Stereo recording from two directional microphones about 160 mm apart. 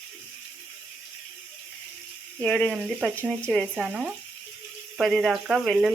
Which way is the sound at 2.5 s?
10° left (ahead or behind).